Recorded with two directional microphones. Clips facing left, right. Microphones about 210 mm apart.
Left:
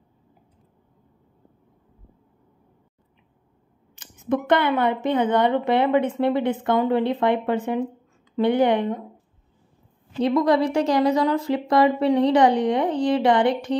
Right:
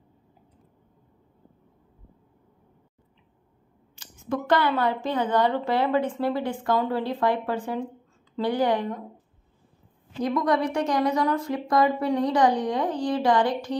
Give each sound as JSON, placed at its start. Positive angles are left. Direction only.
{"t": 3.9, "sound": "a woman's voice", "side_deg": 20}
{"t": 10.2, "sound": "a woman's voice", "side_deg": 30}